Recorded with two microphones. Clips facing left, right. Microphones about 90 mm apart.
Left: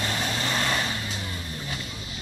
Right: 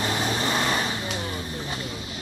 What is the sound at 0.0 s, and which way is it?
Vehicle, 20° right (ahead or behind).